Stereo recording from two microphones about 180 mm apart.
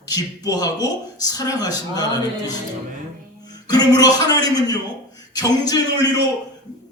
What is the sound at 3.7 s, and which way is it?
A man's voice, 20° left (ahead or behind).